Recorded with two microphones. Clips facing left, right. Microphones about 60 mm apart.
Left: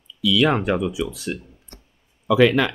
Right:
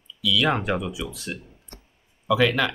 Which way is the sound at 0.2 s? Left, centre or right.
Centre.